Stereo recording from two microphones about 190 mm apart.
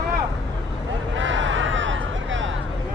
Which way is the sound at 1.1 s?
80° right.